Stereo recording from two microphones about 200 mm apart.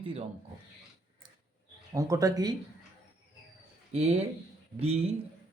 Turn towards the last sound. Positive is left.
turn(degrees=-30)  # may be behind; listen again after turning